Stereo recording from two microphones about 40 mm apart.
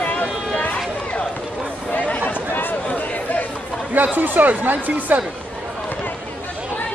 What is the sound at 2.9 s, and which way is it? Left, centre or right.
Chatter, left.